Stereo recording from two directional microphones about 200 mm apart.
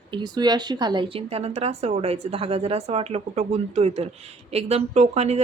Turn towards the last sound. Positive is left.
turn(degrees=-35)  # may be behind; listen again after turning